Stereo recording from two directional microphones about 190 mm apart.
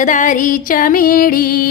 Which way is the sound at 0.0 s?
40° left (ahead or behind).